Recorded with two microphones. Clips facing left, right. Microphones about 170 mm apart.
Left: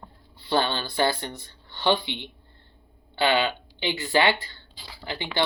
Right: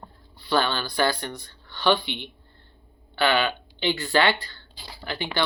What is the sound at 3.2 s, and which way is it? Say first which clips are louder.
Speech: even; 20° left (ahead or behind).